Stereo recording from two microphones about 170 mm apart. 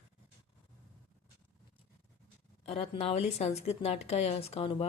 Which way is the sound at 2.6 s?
35° left (ahead or behind).